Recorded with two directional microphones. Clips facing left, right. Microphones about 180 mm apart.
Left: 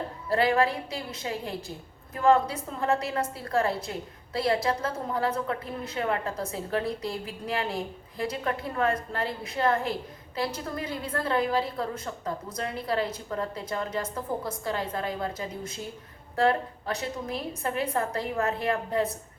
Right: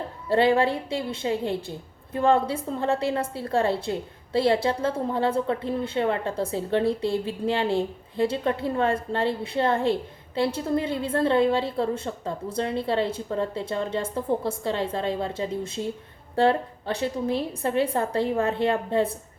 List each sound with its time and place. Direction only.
0.3 s a woman's voice: 30° right (ahead or behind)